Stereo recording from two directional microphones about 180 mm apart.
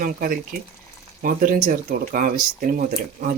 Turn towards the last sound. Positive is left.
turn(degrees=-50)  # may be behind; listen again after turning